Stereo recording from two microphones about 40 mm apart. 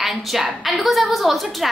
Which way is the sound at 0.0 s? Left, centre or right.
Centre.